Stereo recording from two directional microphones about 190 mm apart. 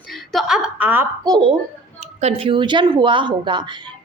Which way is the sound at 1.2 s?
25° right (ahead or behind).